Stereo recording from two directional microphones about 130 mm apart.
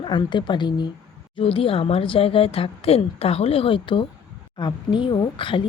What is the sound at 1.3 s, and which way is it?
A woman's voice, 45° left (ahead or behind).